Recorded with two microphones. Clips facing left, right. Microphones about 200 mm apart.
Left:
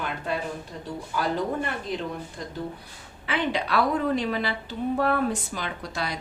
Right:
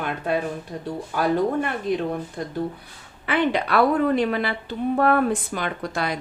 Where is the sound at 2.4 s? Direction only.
60° right (ahead or behind).